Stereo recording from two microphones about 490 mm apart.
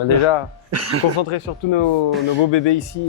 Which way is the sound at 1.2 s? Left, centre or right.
Left.